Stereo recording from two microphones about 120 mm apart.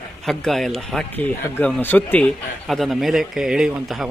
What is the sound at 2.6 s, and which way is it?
A man's voice, centre (ahead or behind).